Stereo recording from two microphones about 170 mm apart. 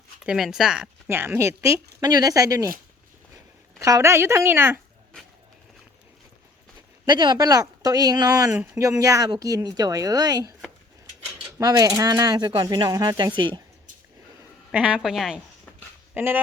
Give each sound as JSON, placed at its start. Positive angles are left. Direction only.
{"t": 0.3, "sound": "a woman's voice", "side_deg": 0}
{"t": 3.8, "sound": "a woman's voice", "side_deg": -20}
{"t": 7.0, "sound": "speech", "side_deg": -25}
{"t": 8.4, "sound": "a woman's voice", "side_deg": -5}
{"t": 8.8, "sound": "speech", "side_deg": -20}
{"t": 11.6, "sound": "speech", "side_deg": -20}
{"t": 14.7, "sound": "a woman's voice", "side_deg": -5}